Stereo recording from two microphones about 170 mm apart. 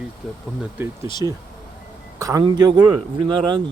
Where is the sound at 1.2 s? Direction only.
25° right (ahead or behind).